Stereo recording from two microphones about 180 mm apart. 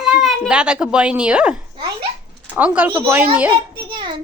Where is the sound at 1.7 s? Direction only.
25° right (ahead or behind).